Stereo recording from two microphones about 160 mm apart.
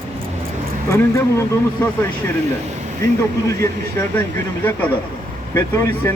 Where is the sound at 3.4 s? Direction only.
15° left (ahead or behind).